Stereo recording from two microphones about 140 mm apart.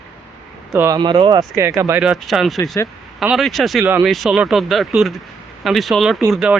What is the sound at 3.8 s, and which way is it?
Speech, 15° right (ahead or behind).